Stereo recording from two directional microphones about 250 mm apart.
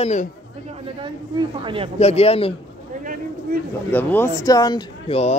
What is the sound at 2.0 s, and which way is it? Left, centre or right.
Speech, left.